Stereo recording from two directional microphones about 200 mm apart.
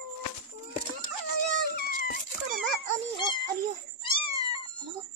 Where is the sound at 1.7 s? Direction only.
45° left (ahead or behind).